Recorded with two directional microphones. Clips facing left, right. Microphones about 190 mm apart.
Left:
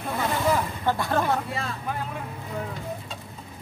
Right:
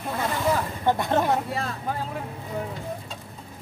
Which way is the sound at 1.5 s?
40° right (ahead or behind).